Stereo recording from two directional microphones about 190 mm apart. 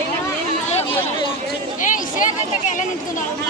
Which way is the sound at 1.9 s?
40° left (ahead or behind).